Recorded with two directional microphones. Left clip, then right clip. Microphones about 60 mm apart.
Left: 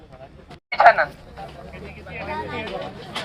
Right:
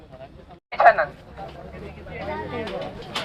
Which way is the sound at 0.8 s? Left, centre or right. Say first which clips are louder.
Left 1 dB; centre.